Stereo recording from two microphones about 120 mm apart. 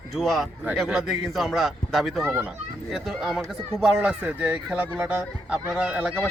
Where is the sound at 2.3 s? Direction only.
15° right (ahead or behind).